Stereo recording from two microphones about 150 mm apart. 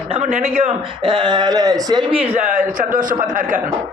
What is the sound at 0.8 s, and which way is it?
Speech, 35° right (ahead or behind).